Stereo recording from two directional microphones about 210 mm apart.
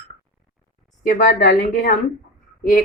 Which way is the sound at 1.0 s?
40° left (ahead or behind).